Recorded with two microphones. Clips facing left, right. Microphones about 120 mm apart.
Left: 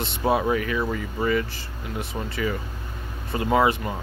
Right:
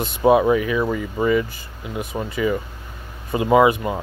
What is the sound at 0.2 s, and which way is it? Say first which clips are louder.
Speech: right 7 dB; 15° right (ahead or behind).